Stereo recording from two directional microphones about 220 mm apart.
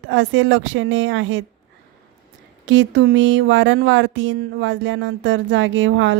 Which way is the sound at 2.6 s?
60° right (ahead or behind).